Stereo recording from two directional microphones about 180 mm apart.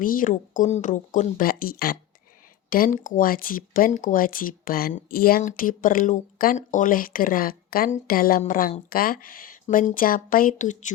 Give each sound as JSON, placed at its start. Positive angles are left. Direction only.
{"t": 0.0, "sound": "speech", "side_deg": 50}